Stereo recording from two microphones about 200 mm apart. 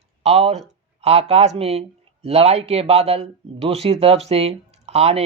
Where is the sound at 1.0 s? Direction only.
30° right (ahead or behind).